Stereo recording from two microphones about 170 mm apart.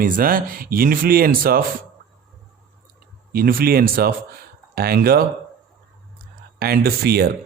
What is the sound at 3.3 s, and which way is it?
Speech, 60° right (ahead or behind).